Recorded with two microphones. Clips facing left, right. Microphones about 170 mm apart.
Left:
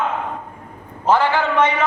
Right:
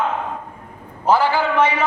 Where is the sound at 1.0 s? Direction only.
10° right (ahead or behind).